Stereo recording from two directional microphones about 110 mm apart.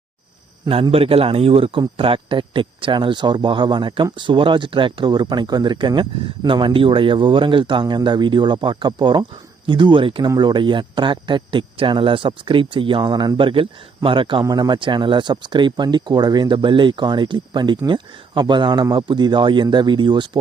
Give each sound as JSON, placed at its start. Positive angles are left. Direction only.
{"t": 0.7, "sound": "a man's voice", "side_deg": -60}
{"t": 10.2, "sound": "speech", "side_deg": -40}
{"t": 14.4, "sound": "speech", "side_deg": -40}